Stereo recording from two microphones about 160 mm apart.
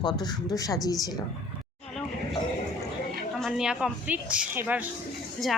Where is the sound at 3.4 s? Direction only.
5° right (ahead or behind).